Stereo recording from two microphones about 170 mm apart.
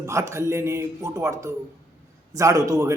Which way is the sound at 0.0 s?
15° right (ahead or behind).